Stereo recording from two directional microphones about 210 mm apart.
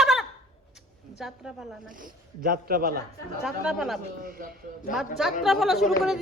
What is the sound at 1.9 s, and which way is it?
Speech, 40° right (ahead or behind).